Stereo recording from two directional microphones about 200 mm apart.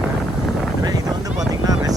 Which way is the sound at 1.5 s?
20° right (ahead or behind).